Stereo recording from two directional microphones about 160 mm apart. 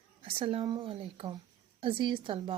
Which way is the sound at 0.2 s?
35° right (ahead or behind).